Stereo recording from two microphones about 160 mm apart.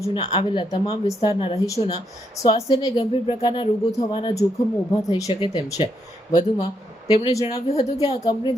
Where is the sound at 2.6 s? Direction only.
30° left (ahead or behind).